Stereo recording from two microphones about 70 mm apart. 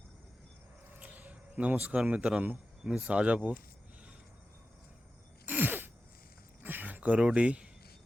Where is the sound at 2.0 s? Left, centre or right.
Centre.